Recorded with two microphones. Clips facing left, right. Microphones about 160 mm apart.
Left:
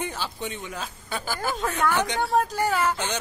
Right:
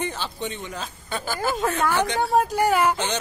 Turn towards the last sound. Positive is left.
turn(degrees=-15)  # may be behind; listen again after turning